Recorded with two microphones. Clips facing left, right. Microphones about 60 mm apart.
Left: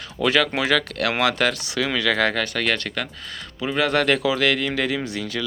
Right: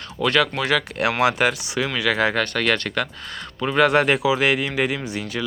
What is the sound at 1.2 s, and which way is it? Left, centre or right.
Speech, centre.